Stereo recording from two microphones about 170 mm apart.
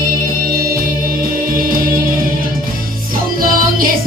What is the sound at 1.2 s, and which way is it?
Music, 55° right (ahead or behind).